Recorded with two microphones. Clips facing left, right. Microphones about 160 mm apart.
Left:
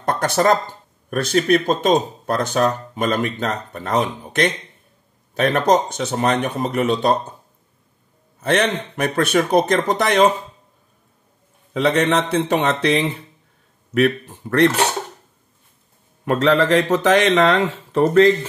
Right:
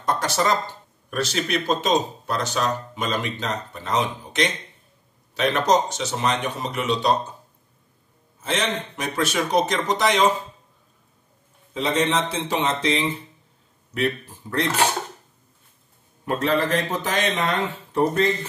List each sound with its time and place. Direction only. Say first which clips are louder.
0.0 s speech: left 5 dB; 55° left (ahead or behind)
8.4 s speech: left 7 dB; 60° left (ahead or behind)
11.7 s speech: left 5 dB; 65° left (ahead or behind)
16.3 s speech: left 6 dB; 90° left